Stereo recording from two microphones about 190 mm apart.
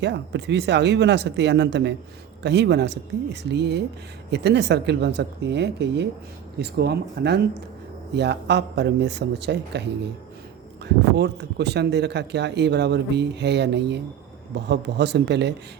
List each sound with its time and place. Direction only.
0.0 s speech: 65° right (ahead or behind)